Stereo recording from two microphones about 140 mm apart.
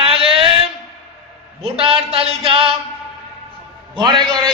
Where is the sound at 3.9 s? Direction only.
35° right (ahead or behind).